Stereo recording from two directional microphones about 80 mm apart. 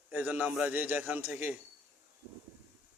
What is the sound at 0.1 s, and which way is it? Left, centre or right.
A man's voice, right.